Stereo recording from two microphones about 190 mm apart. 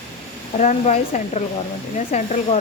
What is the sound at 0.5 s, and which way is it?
A woman's voice, 35° left (ahead or behind).